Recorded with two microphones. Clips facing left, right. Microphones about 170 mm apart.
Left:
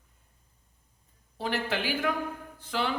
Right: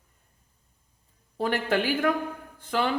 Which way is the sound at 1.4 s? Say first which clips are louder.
Right 5 dB; 50° right (ahead or behind).